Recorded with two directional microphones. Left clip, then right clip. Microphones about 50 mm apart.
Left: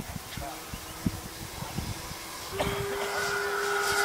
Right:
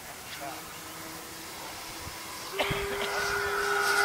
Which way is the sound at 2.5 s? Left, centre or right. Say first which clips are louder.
Right 1 dB; left.